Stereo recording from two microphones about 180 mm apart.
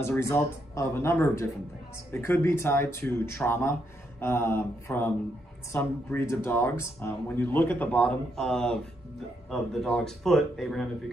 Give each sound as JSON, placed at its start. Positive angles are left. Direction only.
{"t": 0.0, "sound": "speech", "side_deg": 15}